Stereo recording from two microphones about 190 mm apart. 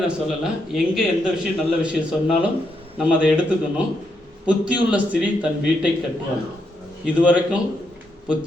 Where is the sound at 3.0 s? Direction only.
5° right (ahead or behind).